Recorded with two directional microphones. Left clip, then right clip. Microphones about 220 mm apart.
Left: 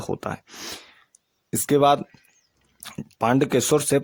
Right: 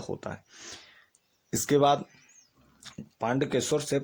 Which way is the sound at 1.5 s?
25° left (ahead or behind).